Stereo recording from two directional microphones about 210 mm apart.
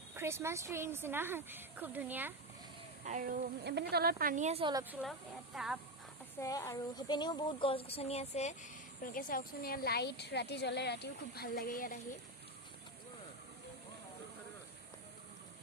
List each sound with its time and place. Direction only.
0.2 s a woman's voice: 10° right (ahead or behind)
3.1 s speech: 40° right (ahead or behind)
3.6 s a woman's voice: 50° right (ahead or behind); by 4.7 s 30° right (ahead or behind)
4.7 s a woman's voice: 10° right (ahead or behind)
6.4 s speech: 15° left (ahead or behind); by 8.5 s 30° left (ahead or behind)
9.0 s a woman's voice: 45° left (ahead or behind)